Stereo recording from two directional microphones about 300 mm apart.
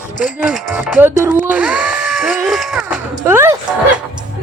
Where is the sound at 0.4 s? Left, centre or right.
Centre.